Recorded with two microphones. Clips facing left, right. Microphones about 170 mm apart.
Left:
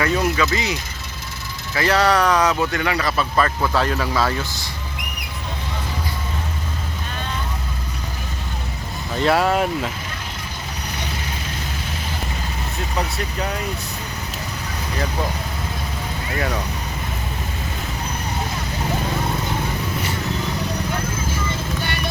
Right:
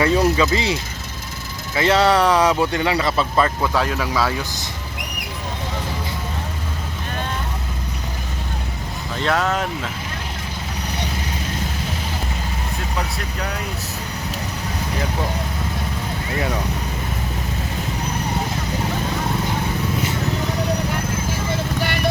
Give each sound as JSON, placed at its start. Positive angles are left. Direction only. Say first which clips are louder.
{"t": 0.0, "sound": "speech", "louder": "right 3 dB", "side_deg": -25}
{"t": 3.6, "sound": "speech", "louder": "even", "side_deg": -5}
{"t": 9.2, "sound": "speech", "louder": "left 3 dB", "side_deg": 10}